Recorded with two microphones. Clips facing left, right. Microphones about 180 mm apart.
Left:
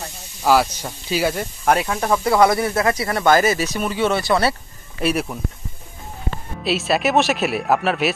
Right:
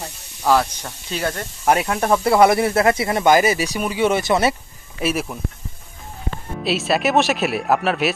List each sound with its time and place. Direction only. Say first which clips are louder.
0.4 s speech: left 1 dB; 5° left (ahead or behind)
1.6 s speech: right 1 dB; 5° right (ahead or behind)
2.2 s speech: right 2 dB; 25° right (ahead or behind)
5.0 s speech: left 1 dB; centre (ahead or behind)
6.6 s speech: even; centre (ahead or behind)